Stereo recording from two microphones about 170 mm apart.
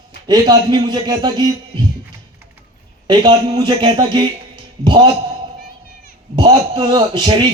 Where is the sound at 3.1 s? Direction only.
25° right (ahead or behind).